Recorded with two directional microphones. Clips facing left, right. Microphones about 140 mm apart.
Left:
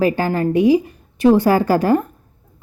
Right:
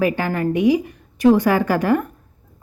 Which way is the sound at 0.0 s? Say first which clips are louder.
Left 3 dB; 30° left (ahead or behind).